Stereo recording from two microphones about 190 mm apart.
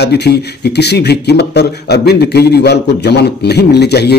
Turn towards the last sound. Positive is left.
turn(degrees=60)  # may be behind; listen again after turning